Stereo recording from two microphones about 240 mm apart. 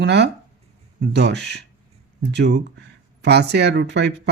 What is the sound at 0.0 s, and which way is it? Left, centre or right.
Speech, right.